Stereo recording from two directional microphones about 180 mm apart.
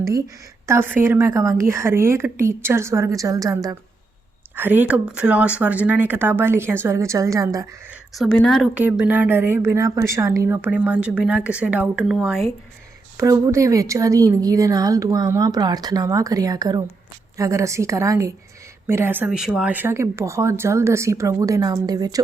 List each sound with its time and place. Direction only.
0.7 s a woman's voice: 10° right (ahead or behind)
8.1 s a woman's voice: centre (ahead or behind)
13.1 s a woman's voice: 15° right (ahead or behind)